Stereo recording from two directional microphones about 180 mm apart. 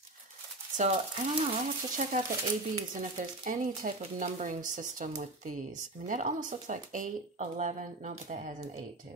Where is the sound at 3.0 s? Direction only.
45° right (ahead or behind).